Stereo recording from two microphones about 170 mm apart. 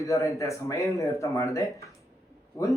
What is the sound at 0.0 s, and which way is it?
Speech, 20° left (ahead or behind).